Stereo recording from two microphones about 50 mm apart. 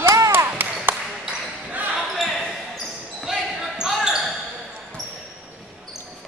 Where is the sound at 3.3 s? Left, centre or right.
Centre.